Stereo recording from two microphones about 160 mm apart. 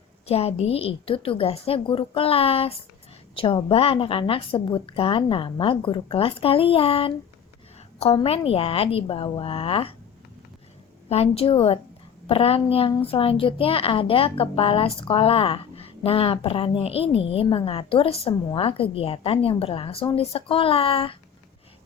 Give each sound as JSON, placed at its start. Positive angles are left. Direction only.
{"t": 0.3, "sound": "a woman's voice", "side_deg": 40}
{"t": 11.1, "sound": "a woman's voice", "side_deg": 40}